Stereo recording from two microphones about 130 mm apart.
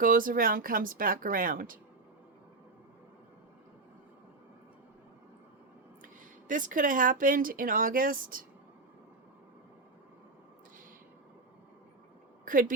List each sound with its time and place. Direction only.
0.0 s speech: 90° right
6.5 s speech: 90° right
12.5 s speech: 90° right